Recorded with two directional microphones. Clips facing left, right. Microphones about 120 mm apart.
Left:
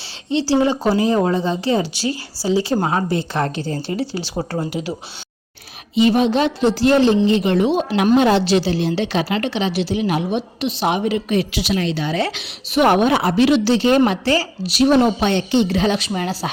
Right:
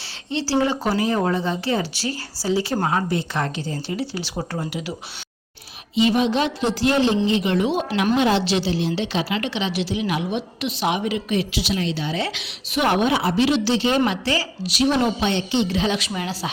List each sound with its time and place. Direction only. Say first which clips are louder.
0.3 s a woman's voice: left 4 dB; 20° left (ahead or behind)
5.9 s a woman's voice: left 4 dB; 45° left (ahead or behind)
8.1 s a woman's voice: left 5 dB; 40° left (ahead or behind)
12.3 s a woman's voice: left 5 dB; 45° left (ahead or behind)